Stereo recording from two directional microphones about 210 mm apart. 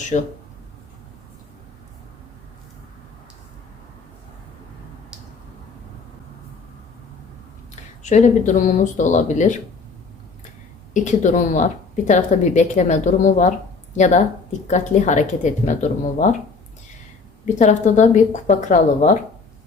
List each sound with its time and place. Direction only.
0.1 s a woman's voice: 35° left (ahead or behind)
8.0 s a woman's voice: 35° left (ahead or behind)
10.9 s a woman's voice: 35° left (ahead or behind)
17.4 s a woman's voice: 35° left (ahead or behind)